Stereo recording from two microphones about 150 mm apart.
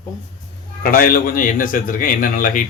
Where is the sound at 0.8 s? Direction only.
75° left (ahead or behind).